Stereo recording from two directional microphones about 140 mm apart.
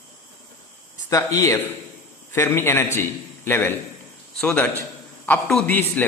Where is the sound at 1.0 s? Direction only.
25° left (ahead or behind).